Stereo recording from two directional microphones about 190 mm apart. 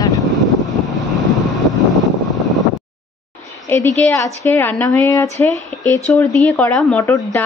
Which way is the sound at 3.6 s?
15° left (ahead or behind).